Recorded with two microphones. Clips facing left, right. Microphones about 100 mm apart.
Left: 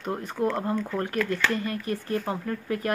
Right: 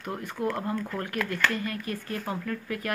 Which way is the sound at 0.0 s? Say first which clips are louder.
Left 3 dB; 25° left (ahead or behind).